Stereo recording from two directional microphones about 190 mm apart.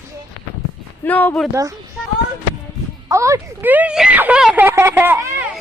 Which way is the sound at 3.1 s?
15° right (ahead or behind).